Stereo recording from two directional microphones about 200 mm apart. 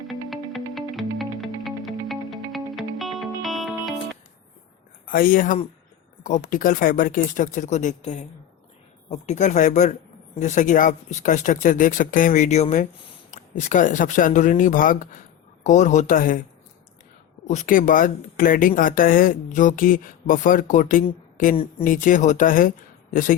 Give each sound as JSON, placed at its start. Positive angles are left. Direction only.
{"t": 0.1, "sound": "music", "side_deg": 0}
{"t": 5.0, "sound": "speech", "side_deg": 45}
{"t": 17.5, "sound": "speech", "side_deg": 40}
{"t": 21.5, "sound": "speech", "side_deg": 30}
{"t": 21.8, "sound": "speech", "side_deg": 40}